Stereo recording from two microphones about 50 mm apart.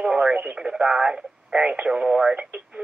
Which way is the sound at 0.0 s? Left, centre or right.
Centre.